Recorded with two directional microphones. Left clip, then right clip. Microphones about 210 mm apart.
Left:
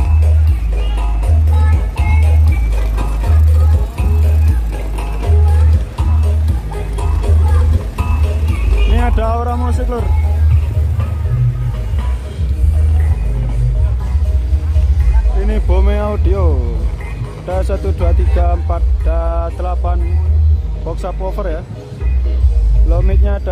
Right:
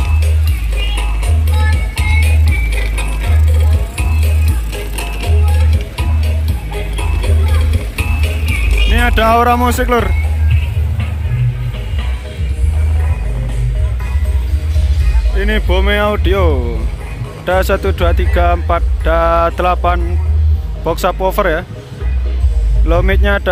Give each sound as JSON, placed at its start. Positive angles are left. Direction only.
{"t": 2.0, "sound": "music", "side_deg": 40}
{"t": 7.9, "sound": "music", "side_deg": 40}
{"t": 8.9, "sound": "music", "side_deg": 0}
{"t": 15.4, "sound": "speech", "side_deg": 0}
{"t": 21.0, "sound": "speech", "side_deg": -10}
{"t": 22.8, "sound": "speech", "side_deg": -5}